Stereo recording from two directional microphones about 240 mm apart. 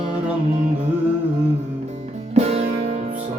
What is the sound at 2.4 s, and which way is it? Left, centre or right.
Music, right.